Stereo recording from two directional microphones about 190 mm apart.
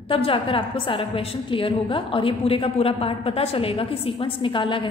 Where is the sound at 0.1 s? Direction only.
30° left (ahead or behind).